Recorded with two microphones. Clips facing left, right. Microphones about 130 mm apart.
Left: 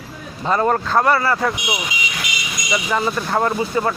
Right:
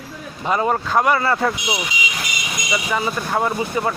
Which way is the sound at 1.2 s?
25° right (ahead or behind).